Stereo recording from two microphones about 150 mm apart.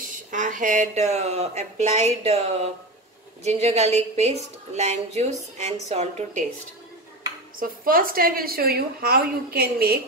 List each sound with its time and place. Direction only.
0.0 s speech: 60° right (ahead or behind)
7.5 s a woman's voice: 70° right (ahead or behind); by 9.9 s 90° right